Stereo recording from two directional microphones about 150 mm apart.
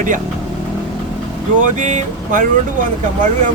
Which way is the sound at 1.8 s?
55° right (ahead or behind).